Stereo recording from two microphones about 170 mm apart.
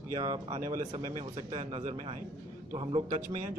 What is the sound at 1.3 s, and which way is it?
Speech, 40° right (ahead or behind).